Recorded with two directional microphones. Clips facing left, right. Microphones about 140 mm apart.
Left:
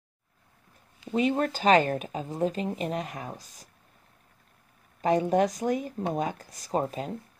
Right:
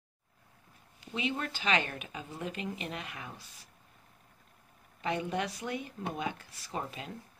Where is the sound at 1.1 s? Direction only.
45° left (ahead or behind).